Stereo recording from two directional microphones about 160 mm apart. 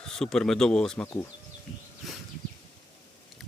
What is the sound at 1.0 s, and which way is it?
Speech, 15° left (ahead or behind).